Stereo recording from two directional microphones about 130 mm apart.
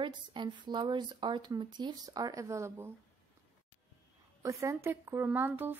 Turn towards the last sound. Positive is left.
turn(degrees=-15)  # may be behind; listen again after turning